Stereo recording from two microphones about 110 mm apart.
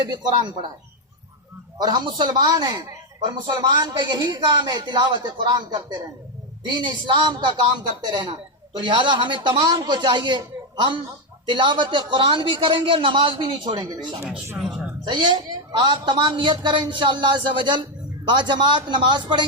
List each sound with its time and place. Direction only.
0.1 s a man's voice: 40° right (ahead or behind)
1.8 s a man's voice: 40° right (ahead or behind)
11.4 s a woman's voice: 45° right (ahead or behind)
13.7 s a man's voice: 35° right (ahead or behind)
15.0 s a woman's voice: 45° right (ahead or behind)